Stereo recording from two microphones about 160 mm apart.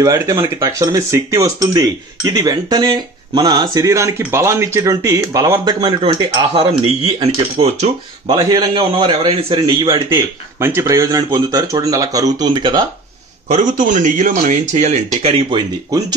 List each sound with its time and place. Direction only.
0.0 s speech: 20° right (ahead or behind); by 7.9 s 40° right (ahead or behind)
8.3 s speech: 25° right (ahead or behind)
10.1 s speech: 15° right (ahead or behind)
13.5 s speech: 55° right (ahead or behind); by 15.6 s 40° right (ahead or behind)